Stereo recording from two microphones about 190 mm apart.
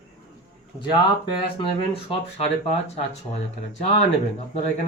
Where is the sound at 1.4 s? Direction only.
30° left (ahead or behind).